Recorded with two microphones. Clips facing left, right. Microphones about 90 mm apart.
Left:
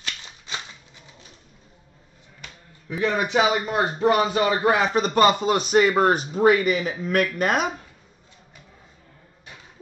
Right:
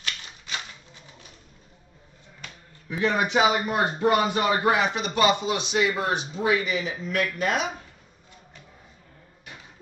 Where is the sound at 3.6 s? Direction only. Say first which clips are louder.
Left 2 dB; 30° left (ahead or behind); by 7.6 s 50° left (ahead or behind).